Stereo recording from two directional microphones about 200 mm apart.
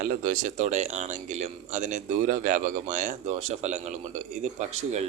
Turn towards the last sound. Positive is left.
turn(degrees=-35)  # may be behind; listen again after turning